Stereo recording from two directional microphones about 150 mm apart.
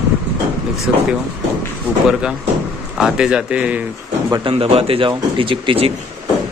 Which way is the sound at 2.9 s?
5° right (ahead or behind).